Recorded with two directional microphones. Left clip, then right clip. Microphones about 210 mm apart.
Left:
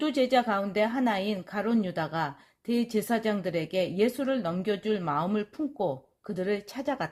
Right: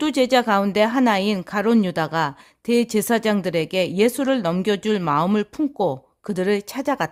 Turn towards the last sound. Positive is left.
turn(degrees=-40)  # may be behind; listen again after turning